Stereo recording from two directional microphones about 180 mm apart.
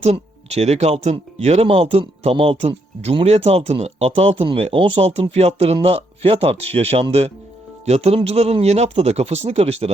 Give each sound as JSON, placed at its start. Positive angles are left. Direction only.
{"t": 0.0, "sound": "speech", "side_deg": -35}